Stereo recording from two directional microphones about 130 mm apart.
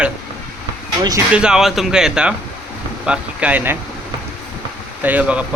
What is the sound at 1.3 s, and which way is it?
Speech, 5° right (ahead or behind).